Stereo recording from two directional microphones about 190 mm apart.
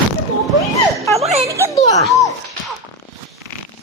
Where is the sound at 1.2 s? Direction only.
35° right (ahead or behind).